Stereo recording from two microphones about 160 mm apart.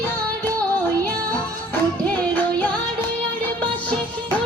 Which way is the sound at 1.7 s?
10° left (ahead or behind).